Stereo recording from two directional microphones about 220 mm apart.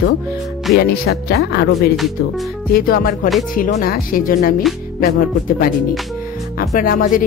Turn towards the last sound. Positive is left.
turn(degrees=40)  # may be behind; listen again after turning